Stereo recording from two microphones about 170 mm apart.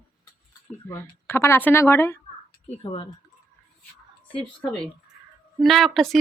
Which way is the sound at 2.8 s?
30° left (ahead or behind).